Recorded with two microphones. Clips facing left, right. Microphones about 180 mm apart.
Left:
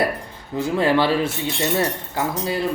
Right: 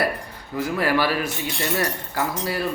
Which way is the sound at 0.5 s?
25° left (ahead or behind).